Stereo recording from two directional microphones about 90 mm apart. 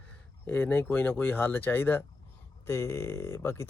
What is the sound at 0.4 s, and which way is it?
Speech, 20° left (ahead or behind).